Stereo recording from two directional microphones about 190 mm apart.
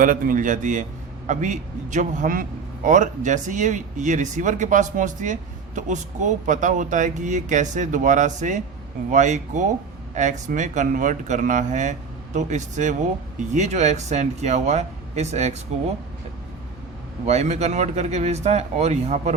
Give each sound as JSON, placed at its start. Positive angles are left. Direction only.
{"t": 0.0, "sound": "a man's voice", "side_deg": -45}
{"t": 17.2, "sound": "a man's voice", "side_deg": -35}